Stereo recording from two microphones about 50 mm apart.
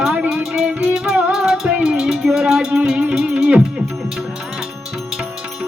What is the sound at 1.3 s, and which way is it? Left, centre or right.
Music, centre.